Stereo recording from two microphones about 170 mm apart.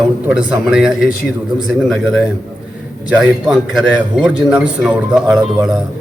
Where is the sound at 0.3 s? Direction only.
5° right (ahead or behind).